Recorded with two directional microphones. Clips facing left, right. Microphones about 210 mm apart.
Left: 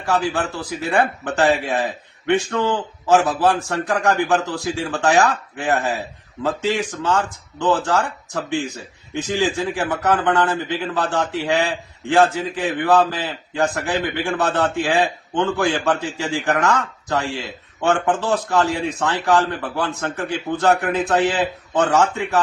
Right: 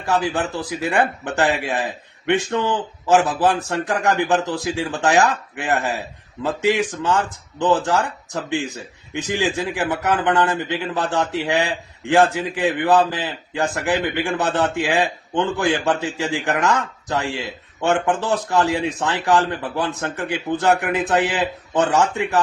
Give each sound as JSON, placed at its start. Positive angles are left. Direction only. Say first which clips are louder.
{"t": 0.1, "sound": "a man's voice", "louder": "even", "side_deg": -20}
{"t": 3.1, "sound": "a man's voice", "louder": "even", "side_deg": -15}